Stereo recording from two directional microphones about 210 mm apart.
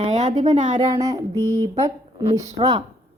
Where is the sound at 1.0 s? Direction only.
15° right (ahead or behind).